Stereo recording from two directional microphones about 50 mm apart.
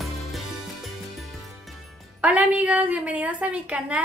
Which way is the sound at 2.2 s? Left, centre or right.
Right.